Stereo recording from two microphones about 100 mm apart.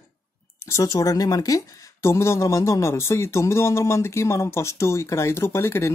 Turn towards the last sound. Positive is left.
turn(degrees=25)  # may be behind; listen again after turning